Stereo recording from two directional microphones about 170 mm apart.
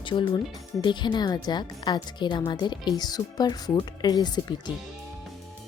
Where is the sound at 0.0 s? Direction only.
30° left (ahead or behind).